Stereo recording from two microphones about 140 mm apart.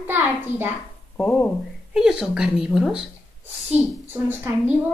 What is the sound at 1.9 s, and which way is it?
Speech, 5° right (ahead or behind).